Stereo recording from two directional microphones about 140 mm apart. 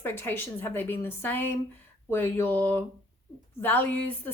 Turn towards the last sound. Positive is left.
turn(degrees=15)  # may be behind; listen again after turning